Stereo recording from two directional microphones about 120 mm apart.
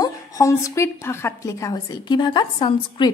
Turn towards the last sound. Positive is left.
turn(degrees=40)  # may be behind; listen again after turning